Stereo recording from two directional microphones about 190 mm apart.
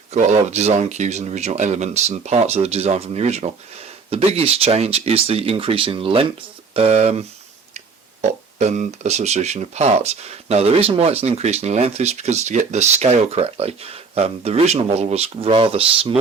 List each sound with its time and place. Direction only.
0.1 s speech: 35° right (ahead or behind)